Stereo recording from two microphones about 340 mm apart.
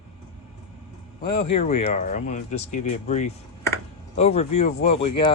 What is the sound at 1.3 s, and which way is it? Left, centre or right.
Speech, centre.